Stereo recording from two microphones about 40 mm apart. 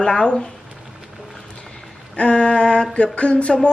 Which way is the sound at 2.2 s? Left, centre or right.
Left.